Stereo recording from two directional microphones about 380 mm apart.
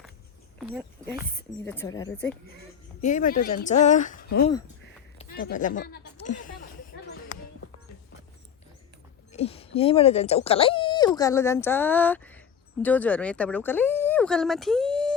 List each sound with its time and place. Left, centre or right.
0.6 s speech: centre
3.0 s a woman's voice: centre
5.1 s a sound: left
9.3 s speech: centre